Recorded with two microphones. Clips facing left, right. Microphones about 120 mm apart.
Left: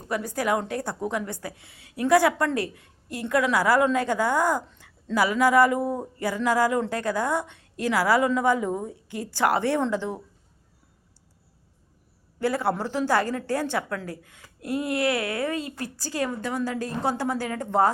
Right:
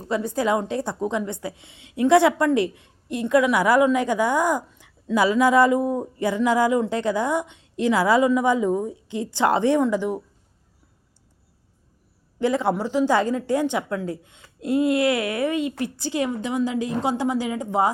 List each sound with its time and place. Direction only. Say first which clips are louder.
0.1 s a woman's voice: right 3 dB; 25° right (ahead or behind)
12.4 s a woman's voice: right 3 dB; 20° right (ahead or behind)